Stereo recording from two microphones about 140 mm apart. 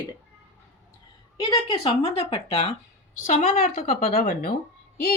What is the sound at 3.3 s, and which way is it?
Speech, 70° left (ahead or behind).